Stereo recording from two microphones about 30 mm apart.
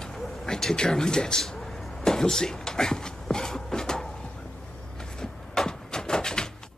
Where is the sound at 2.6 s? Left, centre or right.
Centre.